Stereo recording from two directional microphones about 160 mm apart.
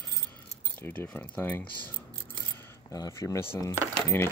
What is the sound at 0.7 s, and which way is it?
Speech, 10° left (ahead or behind).